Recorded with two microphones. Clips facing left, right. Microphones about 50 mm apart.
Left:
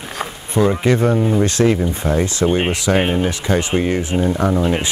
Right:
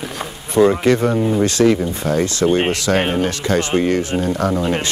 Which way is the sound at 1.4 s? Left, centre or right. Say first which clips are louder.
Right 1 dB; left.